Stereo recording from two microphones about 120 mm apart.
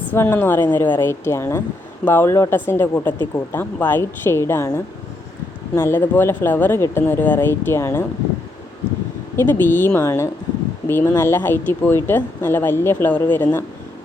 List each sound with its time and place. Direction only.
0.1 s speech: 20° left (ahead or behind)
9.3 s speech: 20° left (ahead or behind)